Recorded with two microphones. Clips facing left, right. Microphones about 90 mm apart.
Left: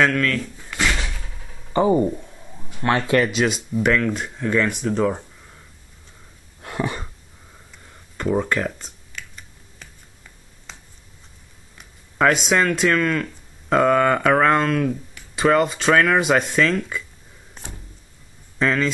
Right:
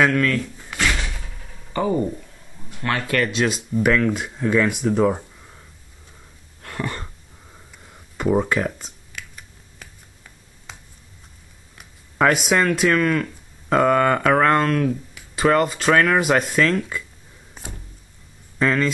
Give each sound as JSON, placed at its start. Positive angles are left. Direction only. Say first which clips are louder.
{"t": 0.0, "sound": "speech", "louder": "right 1 dB", "side_deg": -5}
{"t": 0.7, "sound": "slam", "louder": "even", "side_deg": 15}
{"t": 1.0, "sound": "a sound", "louder": "even", "side_deg": -10}
{"t": 1.7, "sound": "speech", "louder": "left 4 dB", "side_deg": 20}
{"t": 2.8, "sound": "speech", "louder": "left 4 dB", "side_deg": 30}
{"t": 3.3, "sound": "speech", "louder": "left 1 dB", "side_deg": 0}
{"t": 6.6, "sound": "a sound", "louder": "left 3 dB", "side_deg": 15}
{"t": 7.8, "sound": "computer keyboard", "louder": "right 2 dB", "side_deg": -5}
{"t": 10.7, "sound": "a sound", "louder": "right 1 dB", "side_deg": -10}
{"t": 11.8, "sound": "speech", "louder": "even", "side_deg": -5}
{"t": 17.6, "sound": "a sound", "louder": "right 1 dB", "side_deg": -10}
{"t": 18.6, "sound": "speech", "louder": "right 1 dB", "side_deg": 0}